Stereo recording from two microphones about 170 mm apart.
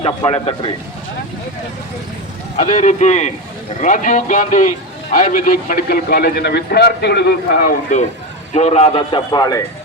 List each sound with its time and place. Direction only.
0.0 s a man's voice: 30° left (ahead or behind)
2.6 s a man's voice: 45° left (ahead or behind); by 7.7 s 75° left (ahead or behind)
7.9 s a man's voice: 50° left (ahead or behind); by 9.6 s 25° left (ahead or behind)